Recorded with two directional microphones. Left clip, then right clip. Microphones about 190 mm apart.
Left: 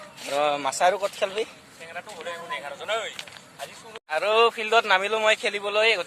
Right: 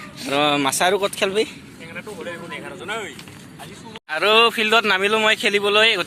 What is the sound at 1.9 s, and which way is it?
Speech, 60° left (ahead or behind).